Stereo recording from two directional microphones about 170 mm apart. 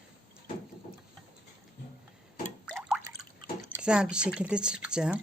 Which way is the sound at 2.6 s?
Centre (ahead or behind).